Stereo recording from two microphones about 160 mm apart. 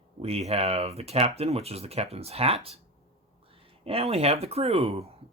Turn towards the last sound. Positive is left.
turn(degrees=-40)  # may be behind; listen again after turning